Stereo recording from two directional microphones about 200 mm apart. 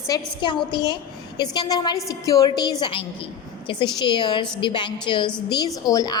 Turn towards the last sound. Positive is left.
turn(degrees=20)  # may be behind; listen again after turning